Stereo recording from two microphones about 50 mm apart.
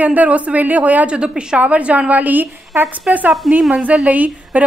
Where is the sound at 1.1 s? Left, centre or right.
Centre; by 2.5 s right.